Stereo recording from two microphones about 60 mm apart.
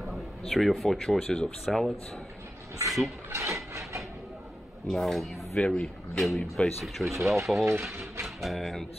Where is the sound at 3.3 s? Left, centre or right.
Right.